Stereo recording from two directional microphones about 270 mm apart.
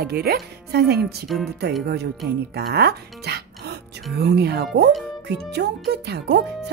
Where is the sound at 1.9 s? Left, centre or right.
Right.